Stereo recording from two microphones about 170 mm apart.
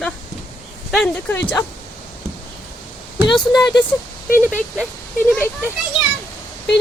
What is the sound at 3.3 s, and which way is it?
Speech, 25° left (ahead or behind).